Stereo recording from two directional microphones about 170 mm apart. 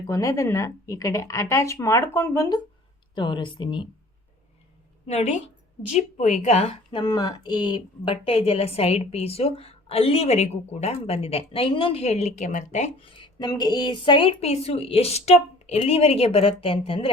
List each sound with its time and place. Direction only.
0.1 s speech: 20° left (ahead or behind)
3.2 s speech: 25° left (ahead or behind)
5.0 s a woman's voice: 40° left (ahead or behind)
7.0 s a woman's voice: 25° left (ahead or behind); by 13.1 s 45° left (ahead or behind)
13.1 s a woman's voice: 30° left (ahead or behind)